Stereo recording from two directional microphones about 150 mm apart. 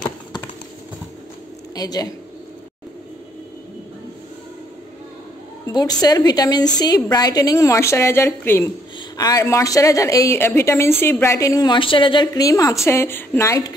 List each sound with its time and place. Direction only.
1.8 s a woman's voice: 25° left (ahead or behind)
5.7 s a woman's voice: 25° left (ahead or behind)